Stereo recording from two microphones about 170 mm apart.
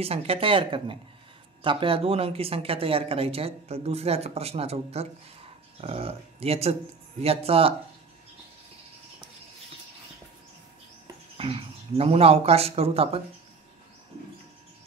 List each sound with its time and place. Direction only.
0.0 s speech: 35° right (ahead or behind)
11.3 s speech: 35° right (ahead or behind)